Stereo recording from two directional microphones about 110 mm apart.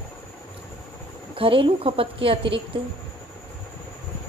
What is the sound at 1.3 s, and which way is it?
A woman's voice, 55° right (ahead or behind).